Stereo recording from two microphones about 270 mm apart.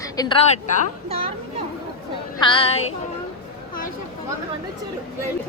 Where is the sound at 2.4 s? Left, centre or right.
Centre.